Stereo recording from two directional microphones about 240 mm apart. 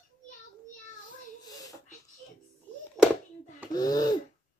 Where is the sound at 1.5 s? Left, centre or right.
Centre.